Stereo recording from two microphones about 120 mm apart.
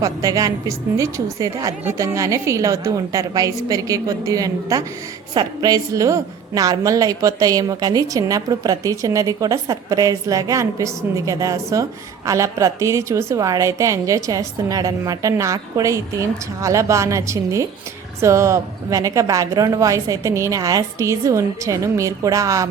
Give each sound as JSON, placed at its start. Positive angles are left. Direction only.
{"t": 0.0, "sound": "a woman's voice", "side_deg": -30}